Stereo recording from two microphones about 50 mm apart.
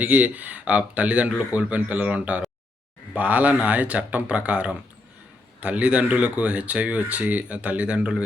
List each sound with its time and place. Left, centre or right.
0.0 s speech: right